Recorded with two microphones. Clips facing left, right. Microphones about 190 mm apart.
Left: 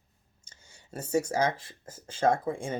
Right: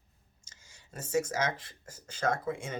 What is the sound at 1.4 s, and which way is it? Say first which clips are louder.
Speech: left 5 dB; 30° left (ahead or behind).